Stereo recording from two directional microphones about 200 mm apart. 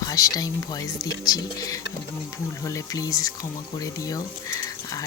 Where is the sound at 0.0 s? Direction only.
15° left (ahead or behind).